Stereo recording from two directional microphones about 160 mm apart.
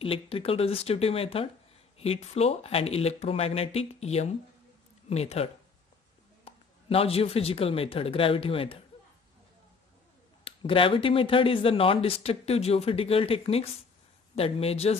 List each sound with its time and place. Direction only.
0.0 s speech: 35° left (ahead or behind)
10.4 s speech: 35° left (ahead or behind)